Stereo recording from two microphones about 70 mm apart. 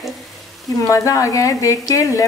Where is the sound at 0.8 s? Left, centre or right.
Left.